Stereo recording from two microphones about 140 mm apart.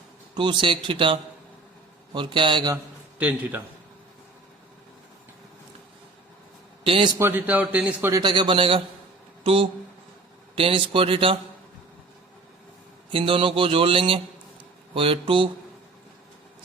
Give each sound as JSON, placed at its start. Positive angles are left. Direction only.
{"t": 0.3, "sound": "speech", "side_deg": -35}
{"t": 3.2, "sound": "a man's voice", "side_deg": -10}
{"t": 6.8, "sound": "speech", "side_deg": -35}
{"t": 7.2, "sound": "a man's voice", "side_deg": -15}
{"t": 8.1, "sound": "speech", "side_deg": -30}
{"t": 13.1, "sound": "speech", "side_deg": -40}